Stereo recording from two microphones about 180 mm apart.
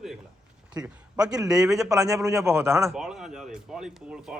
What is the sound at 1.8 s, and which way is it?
A man's voice, 15° right (ahead or behind).